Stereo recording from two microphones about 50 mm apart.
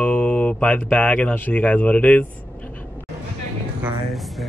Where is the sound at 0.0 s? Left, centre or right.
Left.